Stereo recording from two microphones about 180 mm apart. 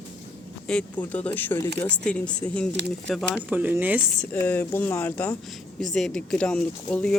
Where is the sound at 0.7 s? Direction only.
5° left (ahead or behind).